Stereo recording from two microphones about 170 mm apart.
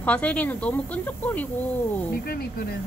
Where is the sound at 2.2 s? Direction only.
60° left (ahead or behind).